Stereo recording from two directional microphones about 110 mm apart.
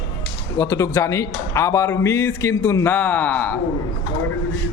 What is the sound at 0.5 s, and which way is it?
A man's voice, 30° left (ahead or behind).